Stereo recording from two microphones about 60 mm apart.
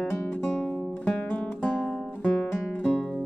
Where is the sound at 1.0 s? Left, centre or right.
Left.